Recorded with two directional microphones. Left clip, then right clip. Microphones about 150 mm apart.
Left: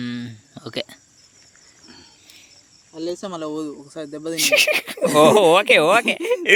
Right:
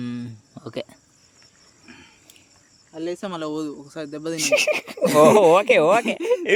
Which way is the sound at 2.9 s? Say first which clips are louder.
Left 1 dB; 15° right (ahead or behind).